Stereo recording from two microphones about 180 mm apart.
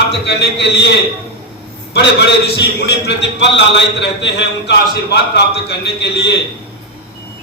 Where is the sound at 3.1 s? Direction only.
75° left (ahead or behind).